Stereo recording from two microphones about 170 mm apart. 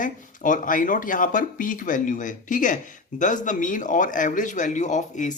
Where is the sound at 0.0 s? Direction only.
50° left (ahead or behind).